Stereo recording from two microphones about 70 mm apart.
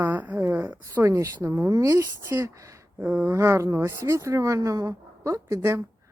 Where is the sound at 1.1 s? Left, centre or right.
Right.